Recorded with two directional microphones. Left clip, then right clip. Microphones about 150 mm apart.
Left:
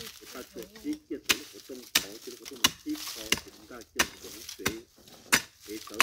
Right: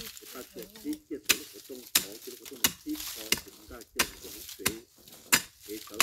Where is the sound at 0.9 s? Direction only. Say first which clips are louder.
Even; 50° left (ahead or behind).